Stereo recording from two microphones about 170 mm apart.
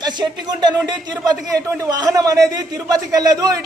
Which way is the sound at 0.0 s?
25° right (ahead or behind).